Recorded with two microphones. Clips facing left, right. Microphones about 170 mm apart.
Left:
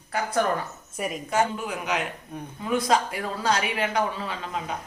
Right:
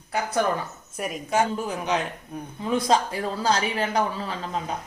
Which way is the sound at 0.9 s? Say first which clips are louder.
Even; centre (ahead or behind).